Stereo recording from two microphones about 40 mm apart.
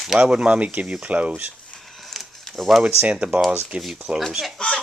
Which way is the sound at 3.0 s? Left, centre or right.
Right.